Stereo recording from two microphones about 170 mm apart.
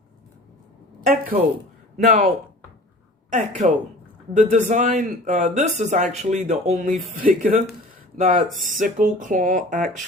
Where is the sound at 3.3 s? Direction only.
45° right (ahead or behind).